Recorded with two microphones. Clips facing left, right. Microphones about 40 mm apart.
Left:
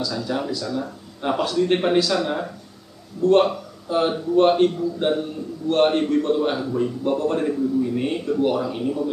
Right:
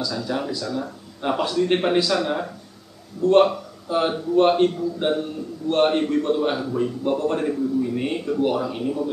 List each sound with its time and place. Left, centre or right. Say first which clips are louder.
0.0 s a man's voice: left 1 dB; centre